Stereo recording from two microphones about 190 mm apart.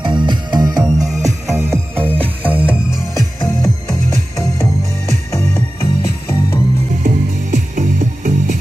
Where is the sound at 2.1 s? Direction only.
10° left (ahead or behind).